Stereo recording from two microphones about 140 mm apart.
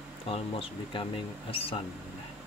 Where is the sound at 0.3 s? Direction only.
40° left (ahead or behind).